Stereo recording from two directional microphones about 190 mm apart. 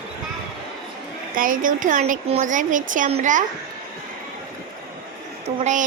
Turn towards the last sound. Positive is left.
turn(degrees=-40)  # may be behind; listen again after turning